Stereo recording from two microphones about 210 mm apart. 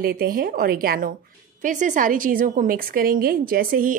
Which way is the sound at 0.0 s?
45° right (ahead or behind).